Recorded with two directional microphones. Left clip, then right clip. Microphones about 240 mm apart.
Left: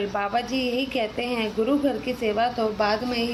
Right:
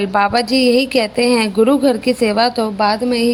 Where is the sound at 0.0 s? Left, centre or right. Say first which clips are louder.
Right 11 dB; right.